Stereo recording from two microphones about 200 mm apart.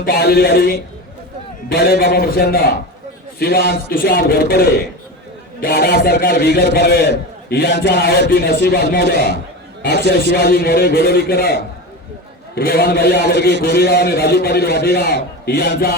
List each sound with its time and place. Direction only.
0.0 s a man's voice: 50° left (ahead or behind)
9.1 s a man's voice: 55° right (ahead or behind)
9.8 s a man's voice: 55° left (ahead or behind)